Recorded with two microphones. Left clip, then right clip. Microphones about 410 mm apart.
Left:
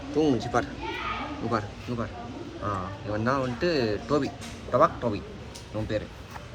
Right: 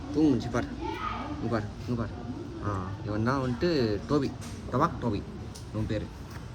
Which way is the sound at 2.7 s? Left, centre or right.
Left.